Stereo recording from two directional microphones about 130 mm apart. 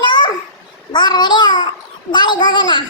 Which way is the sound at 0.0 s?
35° left (ahead or behind).